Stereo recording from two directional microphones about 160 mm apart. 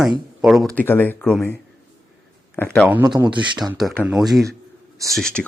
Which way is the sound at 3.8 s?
Centre (ahead or behind).